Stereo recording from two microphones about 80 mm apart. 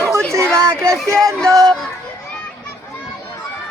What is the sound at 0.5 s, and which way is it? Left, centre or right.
Child singing, right.